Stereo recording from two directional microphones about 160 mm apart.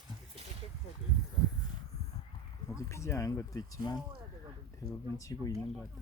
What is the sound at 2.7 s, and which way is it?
Speech, 20° left (ahead or behind).